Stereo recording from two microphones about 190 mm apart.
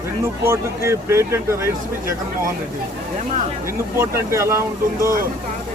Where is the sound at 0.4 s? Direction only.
15° right (ahead or behind).